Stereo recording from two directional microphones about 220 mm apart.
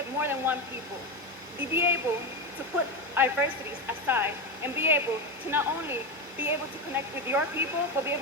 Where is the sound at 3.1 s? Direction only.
10° right (ahead or behind).